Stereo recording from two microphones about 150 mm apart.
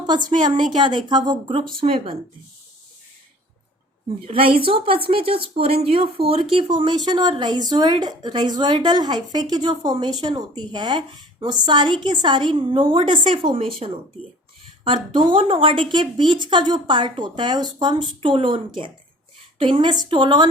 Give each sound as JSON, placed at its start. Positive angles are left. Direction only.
{"t": 0.1, "sound": "a woman's voice", "side_deg": -30}
{"t": 4.3, "sound": "a woman's voice", "side_deg": -35}